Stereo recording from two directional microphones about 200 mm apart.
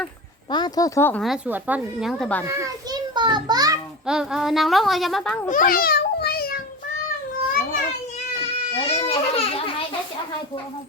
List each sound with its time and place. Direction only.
0.5 s speech: 20° left (ahead or behind)
1.2 s a woman's voice: 5° right (ahead or behind)
2.5 s a child's voice: 15° right (ahead or behind)
4.0 s a woman's voice: 5° right (ahead or behind)
5.5 s babbling: 40° left (ahead or behind)
8.7 s children playing: 30° left (ahead or behind)